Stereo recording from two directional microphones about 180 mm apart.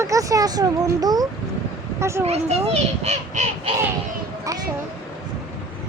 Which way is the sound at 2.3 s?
35° right (ahead or behind).